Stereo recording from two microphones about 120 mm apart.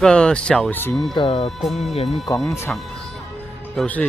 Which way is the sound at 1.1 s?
45° left (ahead or behind).